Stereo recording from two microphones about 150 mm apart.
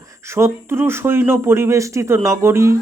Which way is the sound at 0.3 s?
15° right (ahead or behind).